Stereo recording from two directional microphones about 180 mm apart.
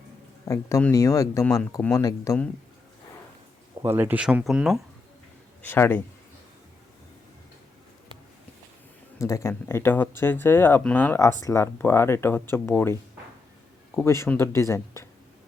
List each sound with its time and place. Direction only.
0.4 s speech: 15° left (ahead or behind)
3.8 s speech: 10° right (ahead or behind)
5.6 s speech: 10° left (ahead or behind)
9.1 s speech: 15° left (ahead or behind)